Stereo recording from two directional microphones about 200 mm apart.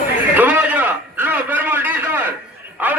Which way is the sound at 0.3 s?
10° right (ahead or behind).